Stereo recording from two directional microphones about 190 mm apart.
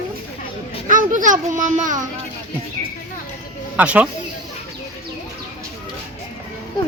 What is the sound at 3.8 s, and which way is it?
Speech, 5° right (ahead or behind).